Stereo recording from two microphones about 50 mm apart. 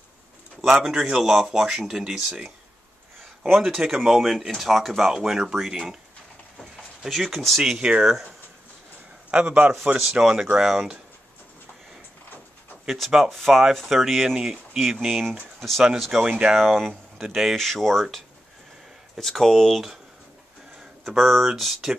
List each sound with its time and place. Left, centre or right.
0.7 s speech: centre
7.1 s speech: centre
7.8 s speech: centre
9.3 s a man's voice: right
10.0 s speech: centre
12.8 s speech: centre
14.4 s speech: centre
16.3 s speech: centre
16.5 s speech: centre
19.1 s speech: centre
21.0 s speech: centre